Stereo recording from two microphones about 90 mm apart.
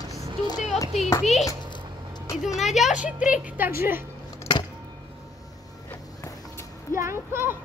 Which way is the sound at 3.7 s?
25° right (ahead or behind).